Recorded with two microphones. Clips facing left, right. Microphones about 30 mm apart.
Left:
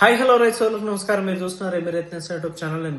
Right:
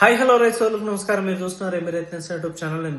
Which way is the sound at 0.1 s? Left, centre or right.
Left.